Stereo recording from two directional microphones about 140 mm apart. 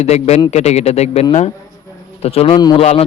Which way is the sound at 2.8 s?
45° left (ahead or behind).